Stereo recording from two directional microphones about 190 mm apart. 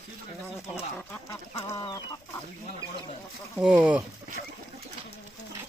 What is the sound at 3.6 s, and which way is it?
Speech, 5° right (ahead or behind).